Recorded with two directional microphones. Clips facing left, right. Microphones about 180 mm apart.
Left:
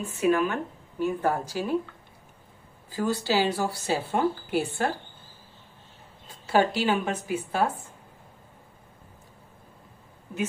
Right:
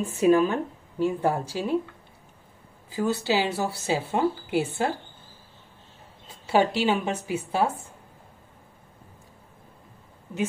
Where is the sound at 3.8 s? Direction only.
20° right (ahead or behind).